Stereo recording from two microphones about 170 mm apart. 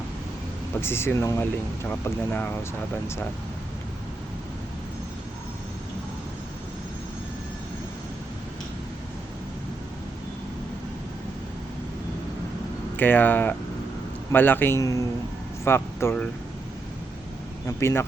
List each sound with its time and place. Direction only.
0.8 s speech: 15° left (ahead or behind)
13.0 s speech: 10° left (ahead or behind)
17.7 s speech: 15° left (ahead or behind)